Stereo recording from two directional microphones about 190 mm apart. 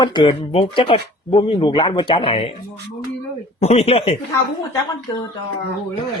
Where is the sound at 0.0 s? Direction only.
25° left (ahead or behind).